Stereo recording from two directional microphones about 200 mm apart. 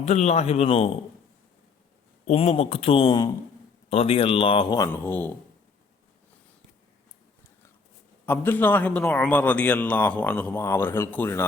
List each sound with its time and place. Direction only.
0.0 s a man's voice: 35° left (ahead or behind)
2.2 s speech: 30° left (ahead or behind)
4.9 s a man's voice: 10° left (ahead or behind)
8.3 s a man's voice: 10° left (ahead or behind)